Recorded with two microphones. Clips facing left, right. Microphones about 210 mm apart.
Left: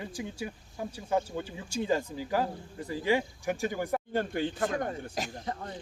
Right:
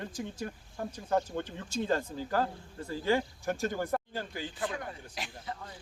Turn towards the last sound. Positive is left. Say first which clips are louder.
# left 5 dB
turn(degrees=45)  # may be behind; listen again after turning